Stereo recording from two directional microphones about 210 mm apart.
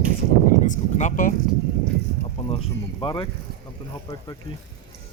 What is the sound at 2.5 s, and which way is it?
Speech, 25° left (ahead or behind).